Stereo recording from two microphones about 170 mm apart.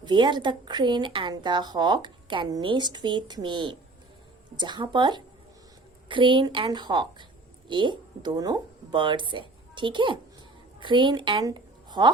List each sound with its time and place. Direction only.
0.0 s a woman's voice: 25° right (ahead or behind)